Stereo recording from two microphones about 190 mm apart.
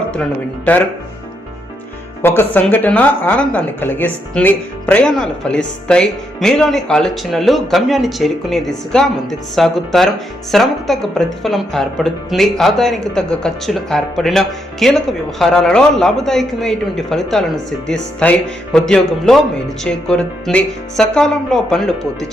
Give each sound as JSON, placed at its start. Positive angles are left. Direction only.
{"t": 0.1, "sound": "speech", "side_deg": 5}
{"t": 2.2, "sound": "a woman's voice", "side_deg": 10}